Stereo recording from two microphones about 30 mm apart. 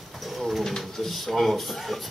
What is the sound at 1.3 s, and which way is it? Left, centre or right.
Speech, centre.